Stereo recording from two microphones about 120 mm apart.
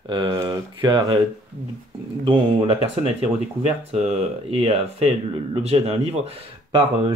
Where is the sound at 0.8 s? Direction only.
40° right (ahead or behind).